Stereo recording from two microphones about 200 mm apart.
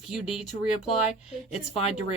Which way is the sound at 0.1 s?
Centre (ahead or behind).